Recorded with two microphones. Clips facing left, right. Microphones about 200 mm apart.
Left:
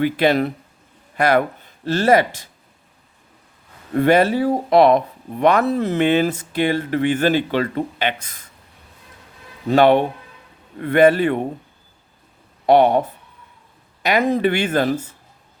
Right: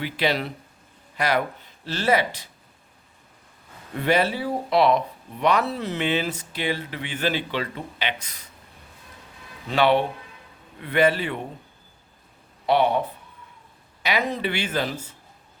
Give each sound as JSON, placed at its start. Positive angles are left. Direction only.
{"t": 0.0, "sound": "speech", "side_deg": 50}
{"t": 3.9, "sound": "speech", "side_deg": 50}
{"t": 9.6, "sound": "speech", "side_deg": 45}
{"t": 12.6, "sound": "speech", "side_deg": 50}
{"t": 14.0, "sound": "speech", "side_deg": 50}